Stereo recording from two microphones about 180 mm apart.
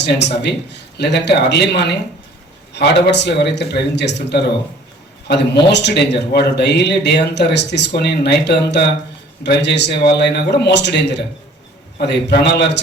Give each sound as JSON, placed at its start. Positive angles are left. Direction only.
{"t": 0.0, "sound": "speech", "side_deg": 70}
{"t": 5.6, "sound": "speech", "side_deg": 70}